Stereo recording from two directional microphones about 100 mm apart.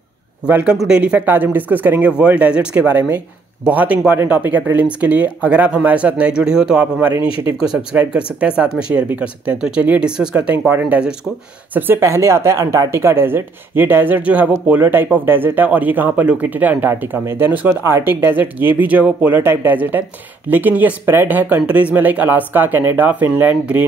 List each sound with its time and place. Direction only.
0.5 s speech: 15° right (ahead or behind)
11.7 s speech: 25° right (ahead or behind)